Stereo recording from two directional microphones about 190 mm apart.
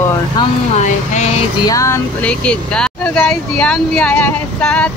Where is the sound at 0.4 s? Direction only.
35° left (ahead or behind).